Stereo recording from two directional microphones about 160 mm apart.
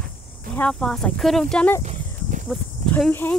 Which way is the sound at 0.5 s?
5° left (ahead or behind).